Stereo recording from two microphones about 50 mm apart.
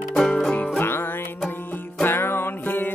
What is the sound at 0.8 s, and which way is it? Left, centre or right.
Music, left.